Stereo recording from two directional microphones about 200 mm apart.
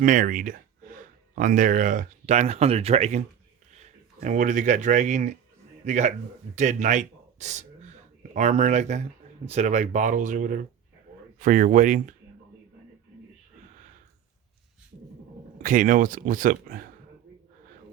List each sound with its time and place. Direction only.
0.0 s speech: 40° right (ahead or behind)
15.6 s speech: 40° right (ahead or behind)